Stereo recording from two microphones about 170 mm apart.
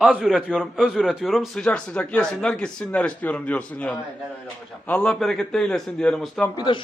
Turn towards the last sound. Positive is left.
turn(degrees=25)  # may be behind; listen again after turning